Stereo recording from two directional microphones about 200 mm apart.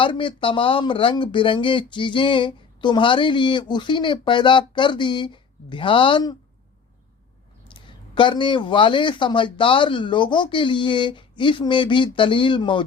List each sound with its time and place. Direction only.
0.0 s speech: 25° left (ahead or behind)
7.7 s speech: 25° left (ahead or behind)